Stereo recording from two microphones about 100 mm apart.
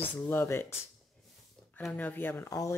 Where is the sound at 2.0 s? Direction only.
20° left (ahead or behind).